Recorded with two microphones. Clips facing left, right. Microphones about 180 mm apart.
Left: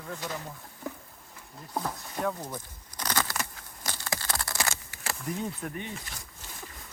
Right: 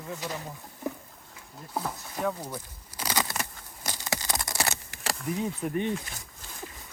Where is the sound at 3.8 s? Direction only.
15° right (ahead or behind).